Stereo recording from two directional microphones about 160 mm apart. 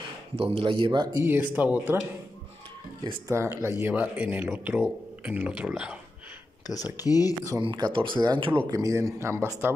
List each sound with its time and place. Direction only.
0.4 s speech: 35° right (ahead or behind)
1.2 s speech: 10° right (ahead or behind)
3.0 s speech: 20° right (ahead or behind)
6.7 s speech: 25° left (ahead or behind)
7.4 s speech: 25° right (ahead or behind)